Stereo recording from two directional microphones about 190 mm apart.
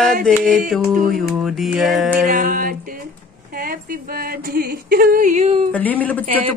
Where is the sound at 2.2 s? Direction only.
45° right (ahead or behind).